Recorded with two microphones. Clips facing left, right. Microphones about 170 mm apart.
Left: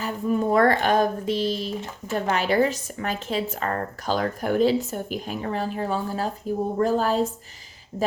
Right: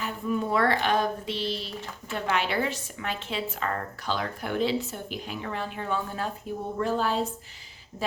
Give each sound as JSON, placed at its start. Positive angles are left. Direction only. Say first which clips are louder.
{"t": 0.0, "sound": "a woman's voice", "louder": "left 5 dB", "side_deg": 40}